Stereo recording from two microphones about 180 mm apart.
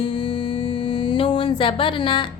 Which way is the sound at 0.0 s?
30° left (ahead or behind).